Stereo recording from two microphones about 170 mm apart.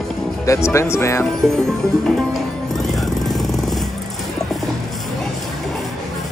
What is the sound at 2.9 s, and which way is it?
Jackhammer, centre (ahead or behind).